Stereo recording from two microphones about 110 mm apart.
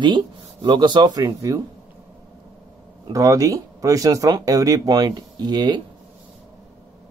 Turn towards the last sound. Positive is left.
turn(degrees=-40)  # may be behind; listen again after turning